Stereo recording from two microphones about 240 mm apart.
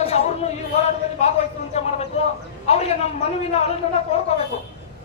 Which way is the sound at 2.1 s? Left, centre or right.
Left.